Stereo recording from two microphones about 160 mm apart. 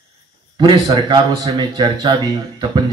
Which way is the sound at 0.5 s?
25° right (ahead or behind).